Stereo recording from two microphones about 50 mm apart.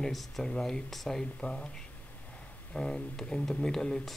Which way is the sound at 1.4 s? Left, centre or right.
Centre.